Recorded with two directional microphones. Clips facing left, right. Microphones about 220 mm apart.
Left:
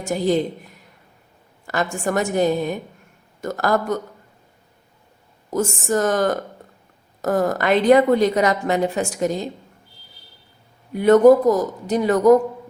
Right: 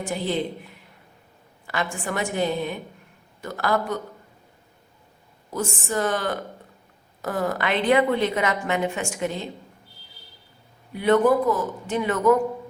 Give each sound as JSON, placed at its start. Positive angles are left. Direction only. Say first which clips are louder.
{"t": 0.0, "sound": "a woman's voice", "louder": "left 6 dB", "side_deg": 45}
{"t": 5.5, "sound": "a woman's voice", "louder": "left 6 dB", "side_deg": 45}
{"t": 10.9, "sound": "a woman's voice", "louder": "left 7 dB", "side_deg": 45}